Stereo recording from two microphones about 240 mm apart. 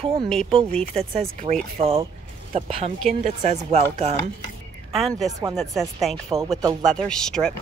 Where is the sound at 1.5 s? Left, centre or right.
Right.